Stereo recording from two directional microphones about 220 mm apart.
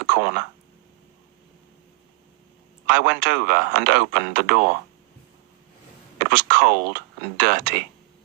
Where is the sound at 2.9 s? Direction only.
45° right (ahead or behind).